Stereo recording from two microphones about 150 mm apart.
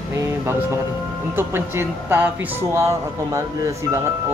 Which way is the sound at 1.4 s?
15° right (ahead or behind).